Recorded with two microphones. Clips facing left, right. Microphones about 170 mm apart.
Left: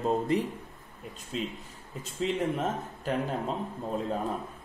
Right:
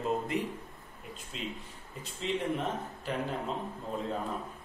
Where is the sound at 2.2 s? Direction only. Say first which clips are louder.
Left 3 dB; 45° left (ahead or behind).